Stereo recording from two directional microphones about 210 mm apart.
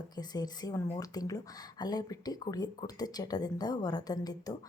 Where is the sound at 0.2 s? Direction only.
20° left (ahead or behind).